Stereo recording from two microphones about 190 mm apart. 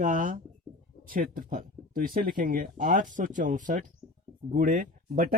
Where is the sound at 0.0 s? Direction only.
45° right (ahead or behind).